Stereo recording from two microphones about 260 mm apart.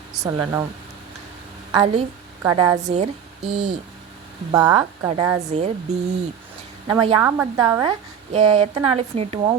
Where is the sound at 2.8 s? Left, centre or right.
Right.